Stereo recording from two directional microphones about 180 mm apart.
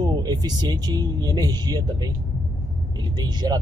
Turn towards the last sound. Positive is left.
turn(degrees=-25)  # may be behind; listen again after turning